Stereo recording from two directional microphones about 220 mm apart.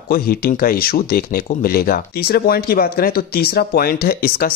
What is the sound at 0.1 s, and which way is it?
Speech, 45° left (ahead or behind).